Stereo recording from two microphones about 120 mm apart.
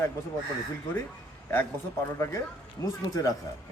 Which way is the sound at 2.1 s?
25° left (ahead or behind).